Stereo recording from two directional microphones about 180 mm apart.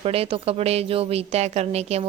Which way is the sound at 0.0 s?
35° right (ahead or behind).